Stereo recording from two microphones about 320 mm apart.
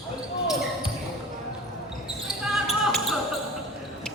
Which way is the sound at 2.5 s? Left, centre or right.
Centre.